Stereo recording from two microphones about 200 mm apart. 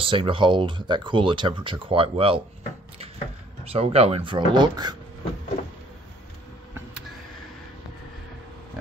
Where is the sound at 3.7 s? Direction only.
30° right (ahead or behind).